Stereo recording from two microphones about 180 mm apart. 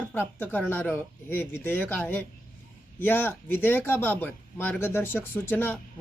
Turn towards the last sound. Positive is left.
turn(degrees=10)  # may be behind; listen again after turning